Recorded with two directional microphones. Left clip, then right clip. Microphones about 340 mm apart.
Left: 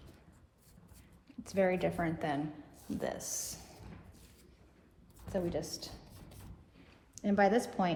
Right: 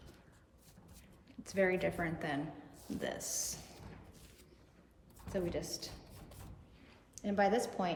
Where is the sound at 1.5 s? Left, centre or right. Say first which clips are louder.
Left 2 dB; centre.